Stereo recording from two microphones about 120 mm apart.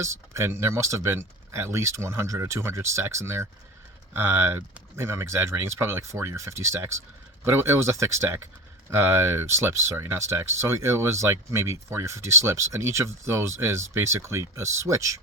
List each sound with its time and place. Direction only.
0.0 s speech: 25° right (ahead or behind)